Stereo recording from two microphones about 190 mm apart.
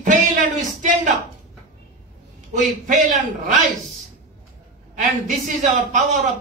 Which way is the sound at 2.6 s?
40° right (ahead or behind).